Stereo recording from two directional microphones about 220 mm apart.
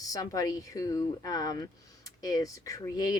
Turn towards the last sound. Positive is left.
turn(degrees=15)  # may be behind; listen again after turning